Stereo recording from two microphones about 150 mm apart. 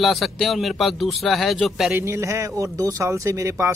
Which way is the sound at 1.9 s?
15° right (ahead or behind).